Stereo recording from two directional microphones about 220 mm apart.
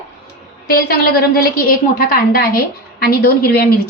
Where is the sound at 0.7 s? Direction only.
40° left (ahead or behind).